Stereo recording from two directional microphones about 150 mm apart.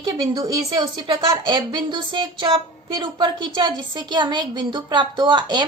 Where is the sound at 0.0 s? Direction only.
30° right (ahead or behind).